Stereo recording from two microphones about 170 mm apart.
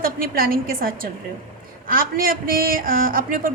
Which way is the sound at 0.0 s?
55° right (ahead or behind).